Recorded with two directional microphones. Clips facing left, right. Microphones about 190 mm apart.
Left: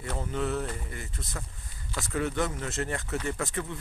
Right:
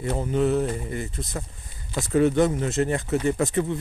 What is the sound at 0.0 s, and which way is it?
Speech, 20° right (ahead or behind).